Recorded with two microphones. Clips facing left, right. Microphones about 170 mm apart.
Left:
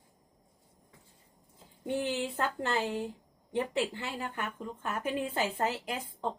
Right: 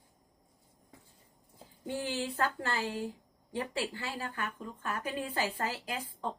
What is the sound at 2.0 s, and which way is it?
A woman's voice, 20° left (ahead or behind).